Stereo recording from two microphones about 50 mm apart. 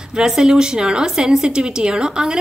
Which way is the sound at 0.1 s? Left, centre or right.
Centre.